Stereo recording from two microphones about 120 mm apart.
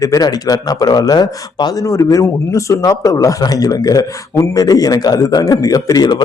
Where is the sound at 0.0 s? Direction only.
30° left (ahead or behind).